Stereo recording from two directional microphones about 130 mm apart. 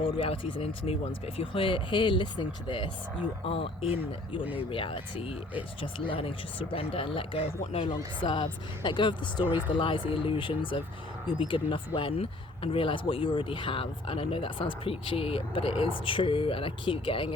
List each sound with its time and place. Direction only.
0.0 s speech: 45° left (ahead or behind)